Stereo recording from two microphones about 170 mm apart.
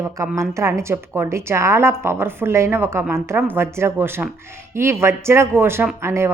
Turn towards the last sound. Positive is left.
turn(degrees=-15)  # may be behind; listen again after turning